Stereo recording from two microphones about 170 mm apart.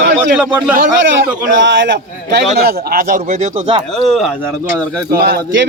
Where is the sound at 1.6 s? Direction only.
90° right.